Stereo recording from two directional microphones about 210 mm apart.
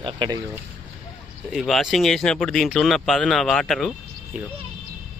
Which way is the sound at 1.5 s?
Centre (ahead or behind).